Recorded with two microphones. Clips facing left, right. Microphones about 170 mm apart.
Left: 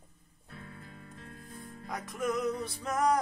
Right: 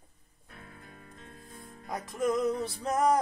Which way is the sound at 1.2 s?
25° right (ahead or behind).